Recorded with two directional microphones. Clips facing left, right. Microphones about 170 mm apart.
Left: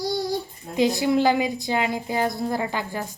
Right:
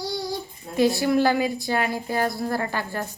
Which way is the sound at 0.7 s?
15° left (ahead or behind).